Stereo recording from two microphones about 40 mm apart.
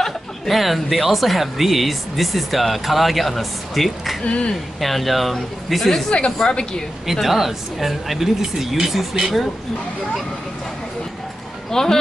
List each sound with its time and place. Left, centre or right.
0.5 s speech: centre
4.2 s speech: left
4.7 s speech: centre
6.0 s speech: left
7.1 s speech: centre
11.7 s speech: centre